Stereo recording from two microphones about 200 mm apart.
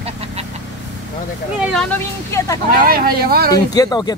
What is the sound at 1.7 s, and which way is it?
Speech, 5° left (ahead or behind).